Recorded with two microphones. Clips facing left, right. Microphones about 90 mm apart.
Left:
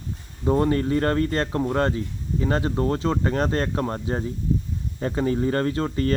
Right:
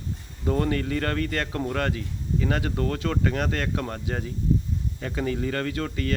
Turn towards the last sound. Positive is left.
turn(degrees=35)  # may be behind; listen again after turning